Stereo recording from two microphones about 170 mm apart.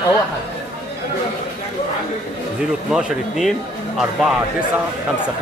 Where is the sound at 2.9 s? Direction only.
5° right (ahead or behind).